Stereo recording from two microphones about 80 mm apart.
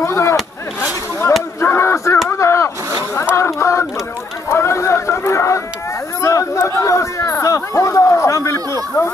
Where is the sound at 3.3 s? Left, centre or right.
Left.